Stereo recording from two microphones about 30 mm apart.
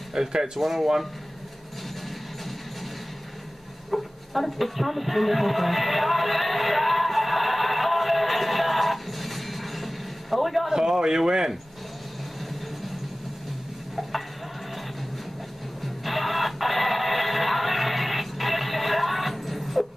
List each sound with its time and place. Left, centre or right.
0.1 s speech: centre
3.9 s music: centre
10.7 s speech: centre
15.8 s music: centre